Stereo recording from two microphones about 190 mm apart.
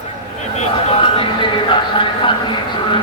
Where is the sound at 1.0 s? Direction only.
25° left (ahead or behind).